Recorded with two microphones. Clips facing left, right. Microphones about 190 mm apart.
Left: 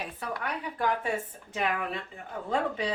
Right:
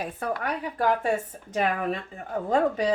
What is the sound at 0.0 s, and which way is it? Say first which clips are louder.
Speech: right 6 dB; 45° right (ahead or behind).